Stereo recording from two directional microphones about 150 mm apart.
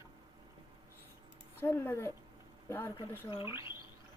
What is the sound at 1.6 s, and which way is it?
Speech, 15° left (ahead or behind).